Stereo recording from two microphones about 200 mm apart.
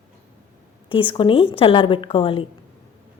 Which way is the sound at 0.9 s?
25° left (ahead or behind).